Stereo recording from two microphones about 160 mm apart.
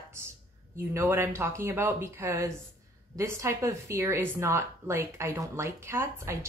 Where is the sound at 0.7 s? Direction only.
15° right (ahead or behind).